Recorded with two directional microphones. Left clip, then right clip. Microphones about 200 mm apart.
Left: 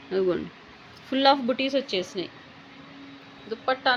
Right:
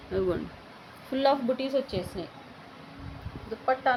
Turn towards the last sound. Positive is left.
turn(degrees=40)  # may be behind; listen again after turning